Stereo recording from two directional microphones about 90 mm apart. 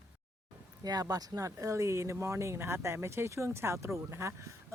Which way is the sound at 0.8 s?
45° right (ahead or behind).